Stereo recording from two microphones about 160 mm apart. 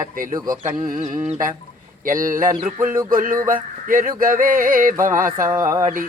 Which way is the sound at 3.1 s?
60° right (ahead or behind).